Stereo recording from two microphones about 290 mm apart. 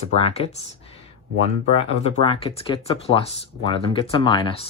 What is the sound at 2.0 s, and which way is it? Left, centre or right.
Speech, centre.